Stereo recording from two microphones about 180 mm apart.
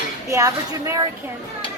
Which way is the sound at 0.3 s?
15° right (ahead or behind).